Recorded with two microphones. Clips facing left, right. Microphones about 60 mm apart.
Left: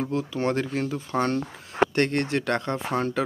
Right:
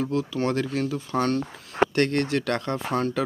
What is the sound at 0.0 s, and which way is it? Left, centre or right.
Speech, left.